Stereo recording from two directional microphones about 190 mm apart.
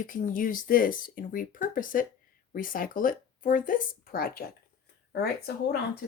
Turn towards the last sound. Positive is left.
turn(degrees=60)  # may be behind; listen again after turning